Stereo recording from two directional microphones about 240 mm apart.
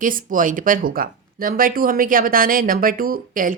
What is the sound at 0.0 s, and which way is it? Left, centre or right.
Speech, right.